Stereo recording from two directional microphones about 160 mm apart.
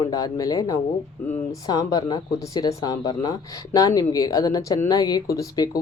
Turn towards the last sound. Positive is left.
turn(degrees=20)  # may be behind; listen again after turning